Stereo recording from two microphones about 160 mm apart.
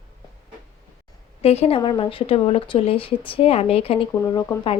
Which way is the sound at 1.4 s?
40° left (ahead or behind).